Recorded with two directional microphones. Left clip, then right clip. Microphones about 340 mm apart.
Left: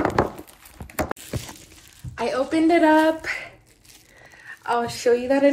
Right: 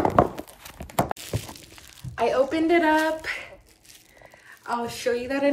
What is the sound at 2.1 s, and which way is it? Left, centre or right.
Speech, centre.